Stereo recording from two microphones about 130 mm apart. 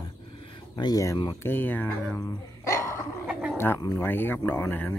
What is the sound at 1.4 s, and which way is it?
Speech, 15° left (ahead or behind).